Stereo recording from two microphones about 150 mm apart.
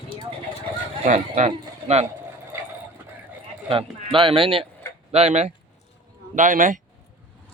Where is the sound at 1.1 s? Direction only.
50° right (ahead or behind).